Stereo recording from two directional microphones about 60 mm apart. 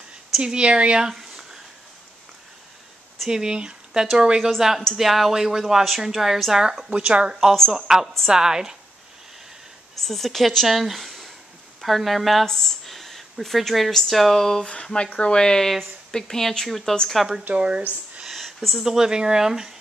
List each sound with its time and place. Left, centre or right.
0.4 s speech: centre
3.3 s a woman's voice: centre
9.9 s speech: centre
17.5 s speech: centre
18.2 s a sound: centre
18.9 s speech: centre